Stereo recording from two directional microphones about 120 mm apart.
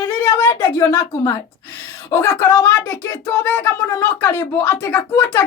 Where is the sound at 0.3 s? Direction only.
25° left (ahead or behind).